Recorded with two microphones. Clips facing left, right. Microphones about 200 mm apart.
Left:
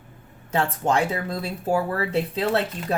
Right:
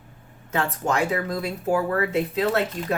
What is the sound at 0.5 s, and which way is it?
Speech, 30° left (ahead or behind).